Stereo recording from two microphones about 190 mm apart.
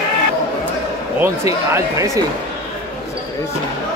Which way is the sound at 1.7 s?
15° right (ahead or behind).